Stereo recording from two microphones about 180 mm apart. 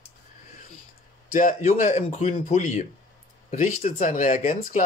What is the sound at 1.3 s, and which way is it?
Speech, 45° left (ahead or behind).